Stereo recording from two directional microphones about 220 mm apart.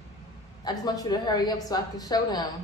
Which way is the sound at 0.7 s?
15° left (ahead or behind).